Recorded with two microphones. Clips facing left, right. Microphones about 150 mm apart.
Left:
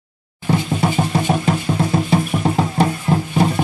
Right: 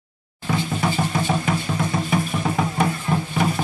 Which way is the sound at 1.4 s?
30° left (ahead or behind).